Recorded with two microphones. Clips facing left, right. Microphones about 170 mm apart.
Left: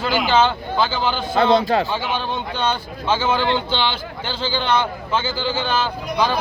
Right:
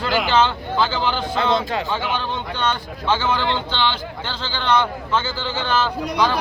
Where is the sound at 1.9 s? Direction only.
10° left (ahead or behind).